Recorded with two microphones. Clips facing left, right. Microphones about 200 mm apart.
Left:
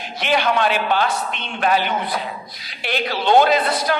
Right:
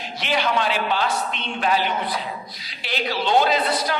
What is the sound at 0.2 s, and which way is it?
A man's voice, 55° left (ahead or behind).